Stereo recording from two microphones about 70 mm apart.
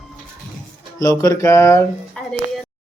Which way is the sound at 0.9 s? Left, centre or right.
Left.